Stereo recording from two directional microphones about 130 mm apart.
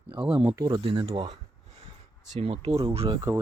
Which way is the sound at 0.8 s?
45° right (ahead or behind).